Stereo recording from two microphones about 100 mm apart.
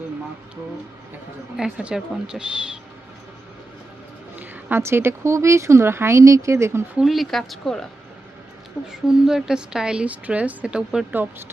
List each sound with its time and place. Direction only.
1.5 s speech: 5° right (ahead or behind)
4.4 s speech: 20° right (ahead or behind)
6.9 s a woman's voice: centre (ahead or behind)
8.9 s speech: 5° right (ahead or behind)